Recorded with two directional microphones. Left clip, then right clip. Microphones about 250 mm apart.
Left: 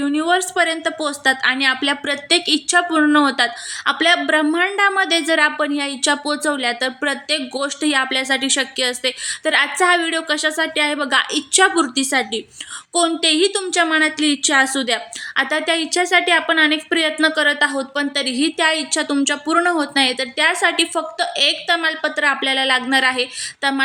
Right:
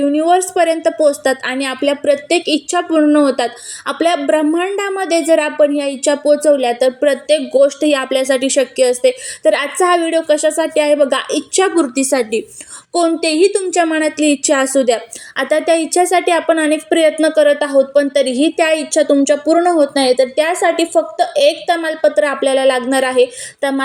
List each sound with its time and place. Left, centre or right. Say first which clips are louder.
0.0 s a woman's voice: right 5 dB; centre
7.8 s speech: right 4 dB; left
8.4 s a woman's voice: right 7 dB; centre